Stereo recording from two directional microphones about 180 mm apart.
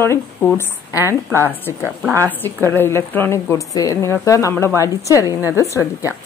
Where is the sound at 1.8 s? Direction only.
10° right (ahead or behind).